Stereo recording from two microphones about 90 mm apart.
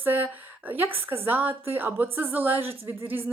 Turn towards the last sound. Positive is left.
turn(degrees=-20)  # may be behind; listen again after turning